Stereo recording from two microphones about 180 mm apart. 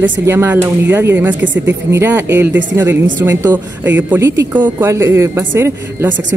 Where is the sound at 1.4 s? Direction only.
90° right.